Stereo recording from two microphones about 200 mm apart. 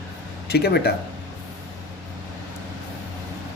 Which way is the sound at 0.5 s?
55° left (ahead or behind).